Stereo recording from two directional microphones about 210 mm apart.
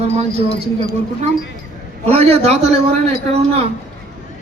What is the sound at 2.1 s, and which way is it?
A man's voice, 30° right (ahead or behind).